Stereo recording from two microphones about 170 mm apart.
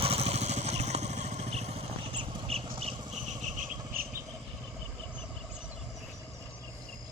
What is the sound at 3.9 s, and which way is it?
Vehicle, 55° right (ahead or behind).